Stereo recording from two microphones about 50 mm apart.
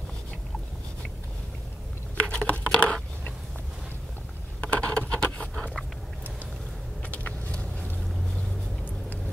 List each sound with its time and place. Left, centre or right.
2.1 s patter: left
2.8 s a sound: left
4.6 s scratch: left
7.1 s vehicle: left